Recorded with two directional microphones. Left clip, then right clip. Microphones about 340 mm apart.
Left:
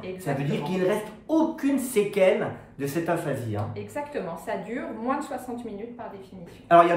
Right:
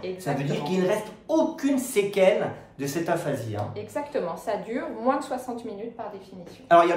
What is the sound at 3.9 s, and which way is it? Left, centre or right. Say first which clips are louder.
Speech: right 3 dB; centre.